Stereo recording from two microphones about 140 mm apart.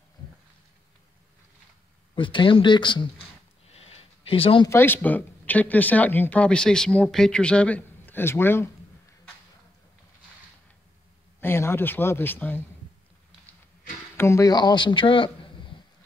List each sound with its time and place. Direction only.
2.1 s speech: 35° left (ahead or behind)
3.6 s a sound: 45° left (ahead or behind)
4.6 s speech: 15° left (ahead or behind)
11.4 s speech: 15° left (ahead or behind)
14.1 s speech: 20° left (ahead or behind); by 15.7 s 35° left (ahead or behind)